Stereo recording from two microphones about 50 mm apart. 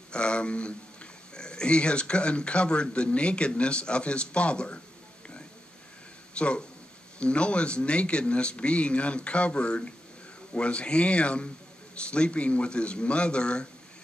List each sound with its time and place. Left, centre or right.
0.1 s a man's voice: left
6.3 s a man's voice: left